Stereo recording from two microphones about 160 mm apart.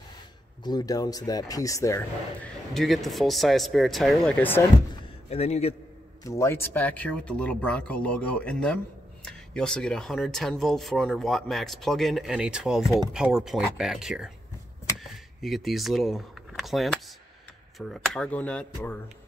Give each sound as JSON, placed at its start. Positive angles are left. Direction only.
{"t": 0.7, "sound": "speech", "side_deg": 25}
{"t": 2.7, "sound": "speech", "side_deg": 0}
{"t": 5.3, "sound": "a man's voice", "side_deg": 40}
{"t": 6.2, "sound": "speech", "side_deg": 15}
{"t": 15.0, "sound": "a sound", "side_deg": 0}
{"t": 17.7, "sound": "speech", "side_deg": 0}